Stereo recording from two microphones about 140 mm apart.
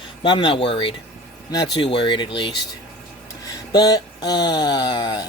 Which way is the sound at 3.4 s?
30° left (ahead or behind).